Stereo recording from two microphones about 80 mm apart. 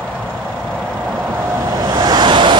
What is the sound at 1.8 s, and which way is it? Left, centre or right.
Vehicle, right.